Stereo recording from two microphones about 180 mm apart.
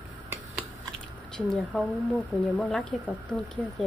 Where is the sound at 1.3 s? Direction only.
5° left (ahead or behind).